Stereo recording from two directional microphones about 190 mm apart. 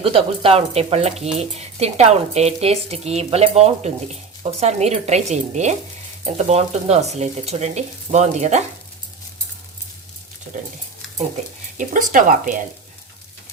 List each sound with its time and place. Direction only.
0.0 s speech: 30° right (ahead or behind)
11.8 s speech: 45° right (ahead or behind)